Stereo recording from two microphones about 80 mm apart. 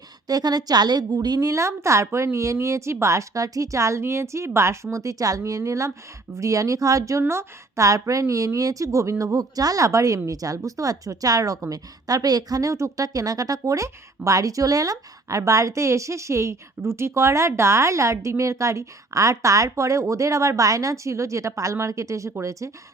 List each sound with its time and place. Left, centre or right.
0.3 s a woman's voice: right